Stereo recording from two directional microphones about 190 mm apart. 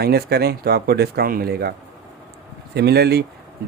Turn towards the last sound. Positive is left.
turn(degrees=-60)  # may be behind; listen again after turning